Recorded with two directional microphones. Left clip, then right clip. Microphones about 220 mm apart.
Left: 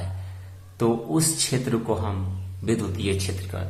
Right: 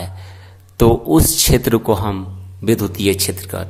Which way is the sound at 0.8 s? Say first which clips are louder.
Right 11 dB; 50° right (ahead or behind).